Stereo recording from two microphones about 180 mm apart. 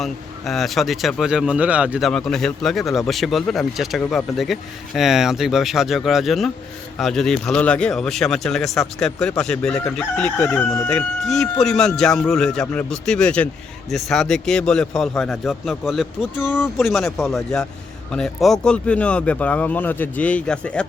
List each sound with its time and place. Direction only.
0.0 s speech: centre (ahead or behind)